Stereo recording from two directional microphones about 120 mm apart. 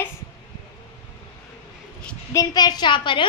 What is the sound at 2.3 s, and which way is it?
Speech, 35° left (ahead or behind).